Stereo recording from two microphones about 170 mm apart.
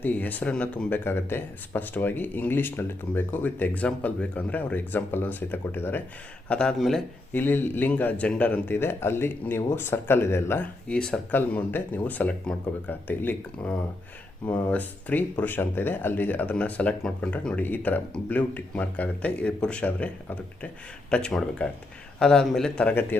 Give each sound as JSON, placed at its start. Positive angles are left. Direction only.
{"t": 0.0, "sound": "a man's voice", "side_deg": 10}
{"t": 7.3, "sound": "a man's voice", "side_deg": 10}